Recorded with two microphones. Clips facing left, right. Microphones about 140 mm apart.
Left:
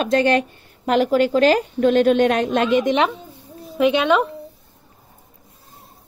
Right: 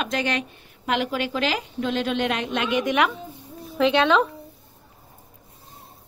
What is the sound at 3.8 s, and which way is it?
Speech, 15° left (ahead or behind).